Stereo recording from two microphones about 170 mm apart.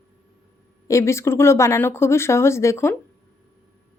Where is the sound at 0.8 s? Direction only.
15° left (ahead or behind).